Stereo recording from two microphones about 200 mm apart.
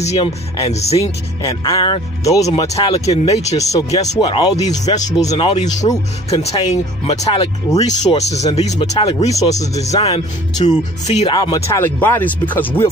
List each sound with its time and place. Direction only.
0.0 s speech: 35° left (ahead or behind)
0.9 s speech: 20° left (ahead or behind)
1.8 s speech: 30° left (ahead or behind)
5.3 s speech: 30° left (ahead or behind)
9.3 s speech: 15° left (ahead or behind)
9.8 s speech: 30° left (ahead or behind)
11.3 s speech: 20° left (ahead or behind)